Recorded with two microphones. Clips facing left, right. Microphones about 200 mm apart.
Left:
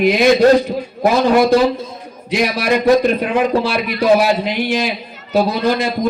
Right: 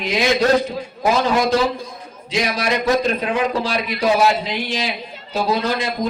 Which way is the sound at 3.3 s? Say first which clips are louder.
Left 5 dB; 60° left (ahead or behind).